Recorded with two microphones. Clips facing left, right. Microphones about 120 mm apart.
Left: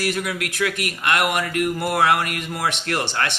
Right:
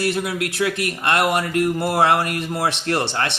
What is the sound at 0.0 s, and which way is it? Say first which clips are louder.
Speech: right 3 dB; 25° right (ahead or behind).